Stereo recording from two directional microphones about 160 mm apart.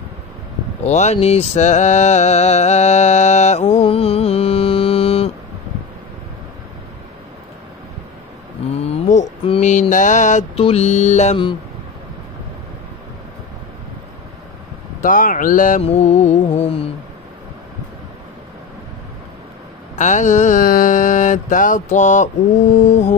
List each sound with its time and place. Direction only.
0.8 s mantra: 45° left (ahead or behind)
8.7 s a sound: 40° left (ahead or behind)
9.5 s mantra: 50° left (ahead or behind)
10.5 s mantra: 40° left (ahead or behind)
15.0 s speech: 55° left (ahead or behind)
15.8 s mantra: 45° left (ahead or behind)
20.0 s mantra: 50° left (ahead or behind)